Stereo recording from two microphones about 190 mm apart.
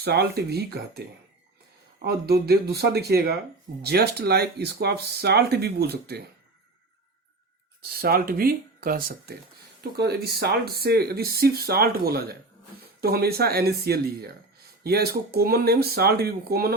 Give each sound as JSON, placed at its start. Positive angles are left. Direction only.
{"t": 0.0, "sound": "speech", "side_deg": -60}
{"t": 2.0, "sound": "speech", "side_deg": -55}
{"t": 7.8, "sound": "speech", "side_deg": -50}